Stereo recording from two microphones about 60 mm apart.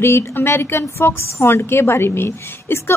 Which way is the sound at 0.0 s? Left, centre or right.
Left.